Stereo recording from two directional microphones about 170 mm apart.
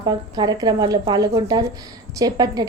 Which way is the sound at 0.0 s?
25° right (ahead or behind).